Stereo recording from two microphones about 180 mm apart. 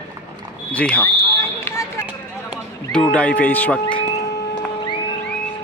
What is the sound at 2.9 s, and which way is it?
Speech, 5° left (ahead or behind).